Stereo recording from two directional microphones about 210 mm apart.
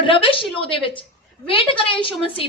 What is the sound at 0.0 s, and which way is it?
A woman's voice, 25° left (ahead or behind).